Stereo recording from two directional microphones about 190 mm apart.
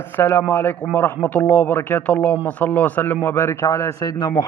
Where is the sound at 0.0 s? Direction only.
10° left (ahead or behind).